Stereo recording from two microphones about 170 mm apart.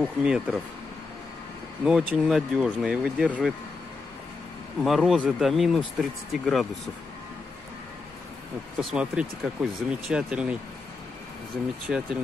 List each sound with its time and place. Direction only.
0.0 s speech: 5° right (ahead or behind)
1.9 s speech: centre (ahead or behind)
4.8 s speech: centre (ahead or behind)
8.7 s speech: 5° right (ahead or behind)
11.9 s speech: centre (ahead or behind)